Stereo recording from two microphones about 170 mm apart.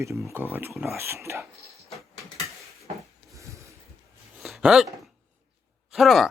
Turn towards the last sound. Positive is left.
turn(degrees=0)  # may be behind; listen again after turning